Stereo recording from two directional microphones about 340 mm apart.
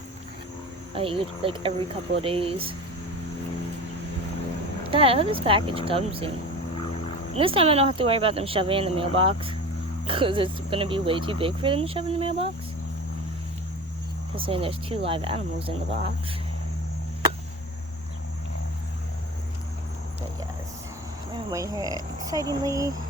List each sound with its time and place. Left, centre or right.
0.9 s speech: centre
4.9 s speech: centre
7.3 s speech: centre
14.3 s speech: centre
21.3 s speech: centre